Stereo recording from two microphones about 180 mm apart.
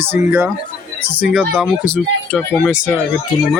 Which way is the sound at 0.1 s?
10° right (ahead or behind).